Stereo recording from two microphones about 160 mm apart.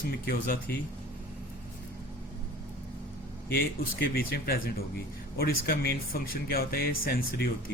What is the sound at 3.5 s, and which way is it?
Speech, 65° left (ahead or behind).